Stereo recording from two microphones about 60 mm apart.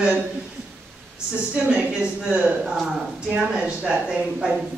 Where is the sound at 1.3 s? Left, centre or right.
Centre.